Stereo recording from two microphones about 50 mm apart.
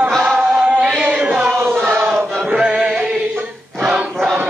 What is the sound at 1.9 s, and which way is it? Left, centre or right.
Chant, right.